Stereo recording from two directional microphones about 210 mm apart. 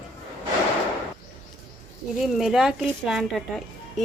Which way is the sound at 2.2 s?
Centre (ahead or behind).